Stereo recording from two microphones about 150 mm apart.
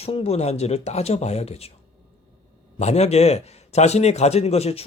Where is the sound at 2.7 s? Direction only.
45° left (ahead or behind).